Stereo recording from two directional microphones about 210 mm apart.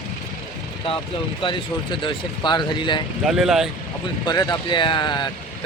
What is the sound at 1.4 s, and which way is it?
Speech, 25° left (ahead or behind).